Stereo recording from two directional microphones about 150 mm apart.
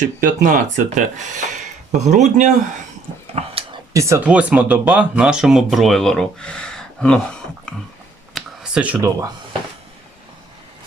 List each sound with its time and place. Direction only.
0.2 s speech: 65° right (ahead or behind); by 3.5 s 45° right (ahead or behind)
3.9 s speech: 20° right (ahead or behind)
4.3 s speech: 10° right (ahead or behind)
8.4 s a sound: 5° right (ahead or behind)